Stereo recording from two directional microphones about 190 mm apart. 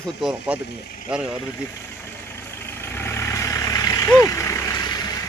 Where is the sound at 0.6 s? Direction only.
60° left (ahead or behind).